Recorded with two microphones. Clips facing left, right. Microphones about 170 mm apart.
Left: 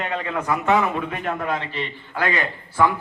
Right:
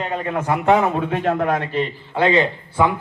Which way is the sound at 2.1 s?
25° right (ahead or behind).